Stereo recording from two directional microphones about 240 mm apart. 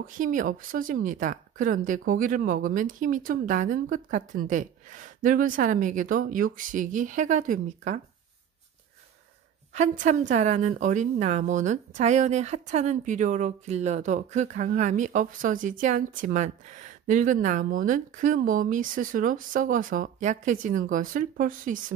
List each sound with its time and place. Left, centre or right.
0.2 s a woman's voice: right
9.8 s a woman's voice: right